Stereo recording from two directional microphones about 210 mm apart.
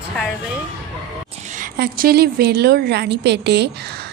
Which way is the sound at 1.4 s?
40° right (ahead or behind).